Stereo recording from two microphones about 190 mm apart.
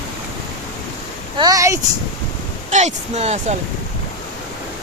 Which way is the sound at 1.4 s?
20° right (ahead or behind).